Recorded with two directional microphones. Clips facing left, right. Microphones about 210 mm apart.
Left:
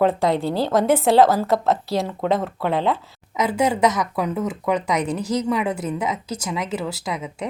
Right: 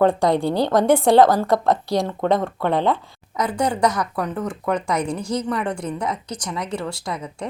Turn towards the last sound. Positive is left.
turn(degrees=5)  # may be behind; listen again after turning